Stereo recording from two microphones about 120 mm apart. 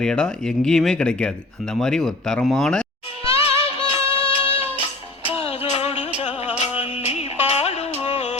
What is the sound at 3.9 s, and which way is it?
Music, 55° left (ahead or behind).